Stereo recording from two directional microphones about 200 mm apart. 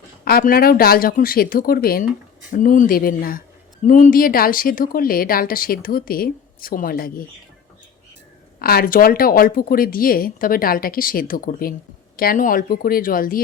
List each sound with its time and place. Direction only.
0.3 s a woman's voice: 45° left (ahead or behind)
8.5 s a woman's voice: 50° left (ahead or behind)